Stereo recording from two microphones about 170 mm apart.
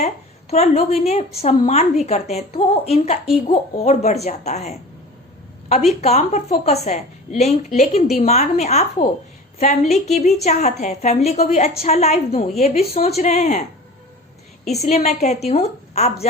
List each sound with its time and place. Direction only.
0.5 s a woman's voice: 40° left (ahead or behind)
5.9 s a woman's voice: 40° left (ahead or behind)
14.7 s a woman's voice: 40° left (ahead or behind)